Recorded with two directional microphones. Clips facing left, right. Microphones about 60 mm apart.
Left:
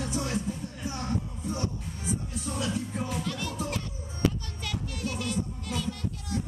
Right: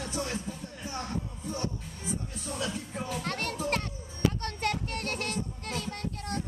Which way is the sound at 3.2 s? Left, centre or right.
Right.